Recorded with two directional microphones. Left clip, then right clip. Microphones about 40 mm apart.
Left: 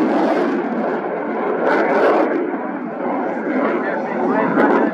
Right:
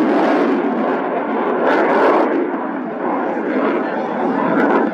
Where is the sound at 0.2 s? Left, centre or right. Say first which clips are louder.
Right 2 dB; centre.